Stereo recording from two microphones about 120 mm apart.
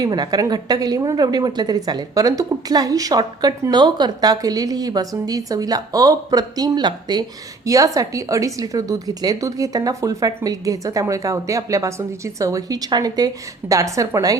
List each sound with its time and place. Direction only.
0.0 s a woman's voice: 35° right (ahead or behind)